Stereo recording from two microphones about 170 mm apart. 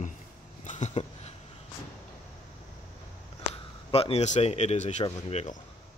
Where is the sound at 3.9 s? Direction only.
35° left (ahead or behind).